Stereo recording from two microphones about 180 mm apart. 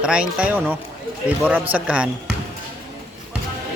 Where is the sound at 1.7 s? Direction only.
5° right (ahead or behind).